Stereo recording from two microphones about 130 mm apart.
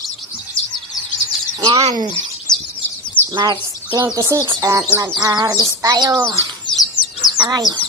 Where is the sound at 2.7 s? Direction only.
40° left (ahead or behind).